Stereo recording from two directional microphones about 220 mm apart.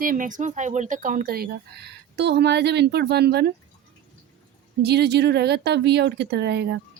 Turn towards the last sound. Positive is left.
turn(degrees=-50)  # may be behind; listen again after turning